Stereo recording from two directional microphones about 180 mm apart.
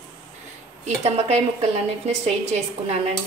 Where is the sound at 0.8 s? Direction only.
35° right (ahead or behind).